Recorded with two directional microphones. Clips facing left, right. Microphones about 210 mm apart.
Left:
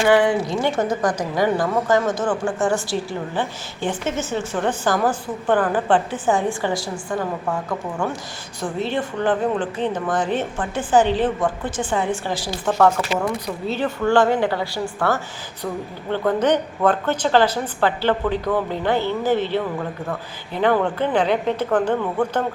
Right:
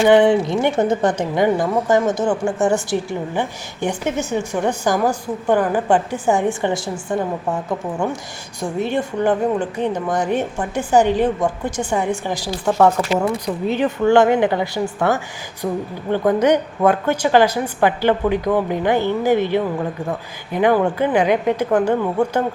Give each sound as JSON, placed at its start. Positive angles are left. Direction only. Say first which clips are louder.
{"t": 0.0, "sound": "speech", "louder": "right 4 dB", "side_deg": -20}